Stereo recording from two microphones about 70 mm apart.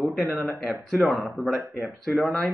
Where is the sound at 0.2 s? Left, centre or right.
Right.